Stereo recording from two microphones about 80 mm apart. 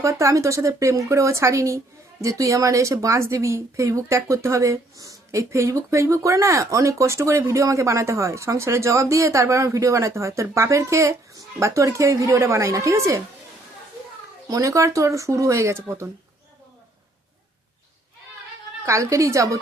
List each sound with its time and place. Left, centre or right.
0.0 s speech: right
14.5 s speech: right
18.9 s speech: right